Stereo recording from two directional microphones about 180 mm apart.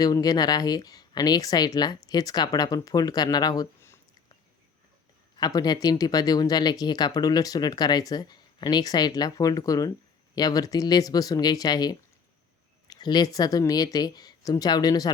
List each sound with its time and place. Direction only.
0.0 s speech: 20° left (ahead or behind)
5.4 s speech: 20° left (ahead or behind)